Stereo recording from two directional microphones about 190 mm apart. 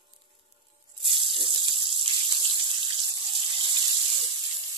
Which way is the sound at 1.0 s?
25° right (ahead or behind).